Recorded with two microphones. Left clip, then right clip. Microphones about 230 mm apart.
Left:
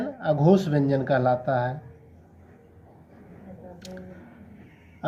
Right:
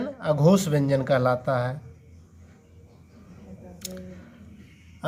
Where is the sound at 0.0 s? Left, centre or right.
Right.